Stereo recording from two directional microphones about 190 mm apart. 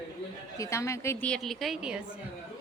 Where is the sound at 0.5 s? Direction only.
15° left (ahead or behind); by 2.0 s 5° right (ahead or behind).